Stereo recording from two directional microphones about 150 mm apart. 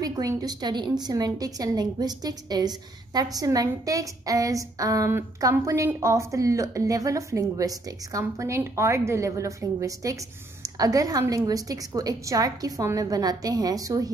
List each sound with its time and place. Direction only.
0.0 s a woman's voice: 25° right (ahead or behind)